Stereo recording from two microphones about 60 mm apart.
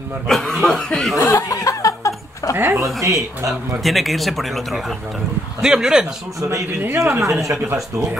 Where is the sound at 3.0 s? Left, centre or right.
Right.